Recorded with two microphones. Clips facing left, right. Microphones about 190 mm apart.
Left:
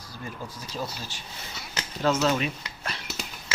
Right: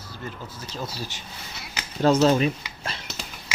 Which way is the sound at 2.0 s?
35° right (ahead or behind).